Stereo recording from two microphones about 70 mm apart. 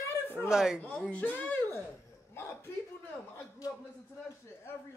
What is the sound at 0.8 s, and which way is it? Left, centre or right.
Speech, left.